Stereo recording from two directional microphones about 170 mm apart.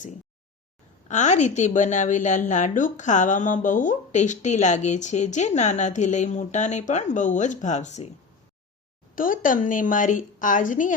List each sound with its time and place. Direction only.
1.0 s a woman's voice: 45° left (ahead or behind)
9.1 s a woman's voice: 55° left (ahead or behind)